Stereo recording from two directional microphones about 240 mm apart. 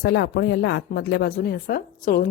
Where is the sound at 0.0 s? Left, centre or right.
Left.